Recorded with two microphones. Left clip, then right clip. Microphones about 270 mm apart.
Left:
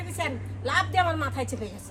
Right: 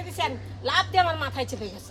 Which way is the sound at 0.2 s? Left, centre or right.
Right.